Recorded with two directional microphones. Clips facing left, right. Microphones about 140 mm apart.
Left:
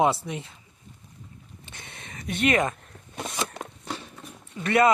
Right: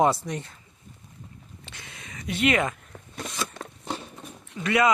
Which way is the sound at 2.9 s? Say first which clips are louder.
Right 4 dB; 90° right.